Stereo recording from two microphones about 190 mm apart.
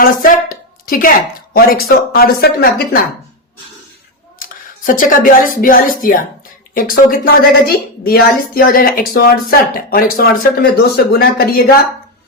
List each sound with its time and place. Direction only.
0.0 s a sound: 45° left (ahead or behind)
1.5 s speech: 50° left (ahead or behind)
4.4 s speech: 45° left (ahead or behind)